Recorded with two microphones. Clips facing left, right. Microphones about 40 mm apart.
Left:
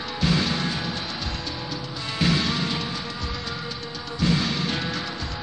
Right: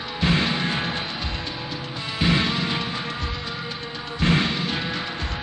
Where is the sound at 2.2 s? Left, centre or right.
Right.